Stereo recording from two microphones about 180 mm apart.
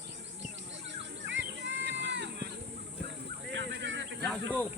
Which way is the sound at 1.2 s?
85° right.